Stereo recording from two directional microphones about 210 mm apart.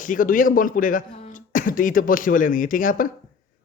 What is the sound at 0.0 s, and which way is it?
A man's voice, 40° left (ahead or behind).